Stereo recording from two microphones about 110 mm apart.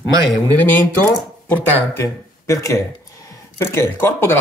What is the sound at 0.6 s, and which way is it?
Speech, 20° left (ahead or behind).